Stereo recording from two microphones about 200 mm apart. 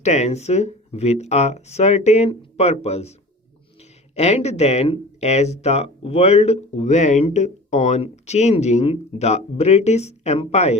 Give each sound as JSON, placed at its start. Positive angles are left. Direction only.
{"t": 0.0, "sound": "speech", "side_deg": 35}